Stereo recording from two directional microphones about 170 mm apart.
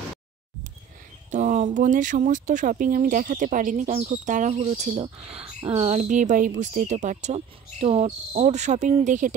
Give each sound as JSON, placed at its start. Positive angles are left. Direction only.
{"t": 1.3, "sound": "speech", "side_deg": -45}